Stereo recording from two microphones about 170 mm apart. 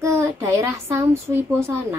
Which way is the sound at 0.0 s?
15° right (ahead or behind).